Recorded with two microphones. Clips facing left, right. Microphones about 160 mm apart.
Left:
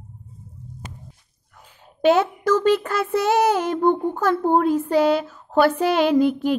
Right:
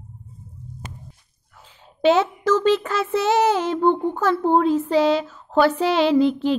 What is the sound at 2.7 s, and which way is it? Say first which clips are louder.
Child singing: even; 10° left (ahead or behind).